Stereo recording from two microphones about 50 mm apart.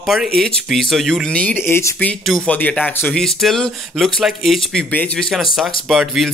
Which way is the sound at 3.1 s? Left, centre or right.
Centre.